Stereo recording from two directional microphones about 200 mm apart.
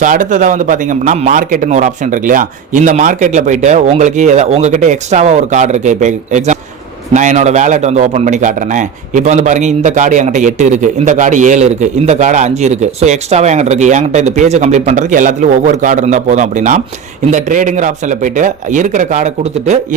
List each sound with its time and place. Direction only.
0.0 s a man's voice: 40° right (ahead or behind)